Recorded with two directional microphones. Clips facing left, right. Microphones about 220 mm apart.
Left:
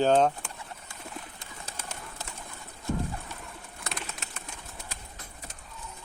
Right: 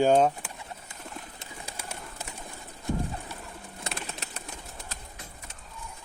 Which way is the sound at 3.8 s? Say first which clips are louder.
Right 1 dB; 35° right (ahead or behind).